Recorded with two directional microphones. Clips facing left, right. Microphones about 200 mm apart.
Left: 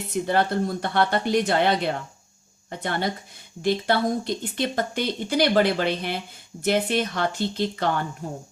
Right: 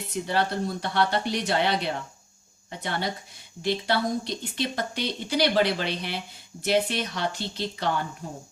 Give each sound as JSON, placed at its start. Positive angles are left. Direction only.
{"t": 0.1, "sound": "speech", "side_deg": 50}